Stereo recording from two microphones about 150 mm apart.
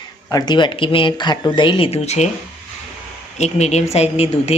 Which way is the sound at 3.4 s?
45° left (ahead or behind).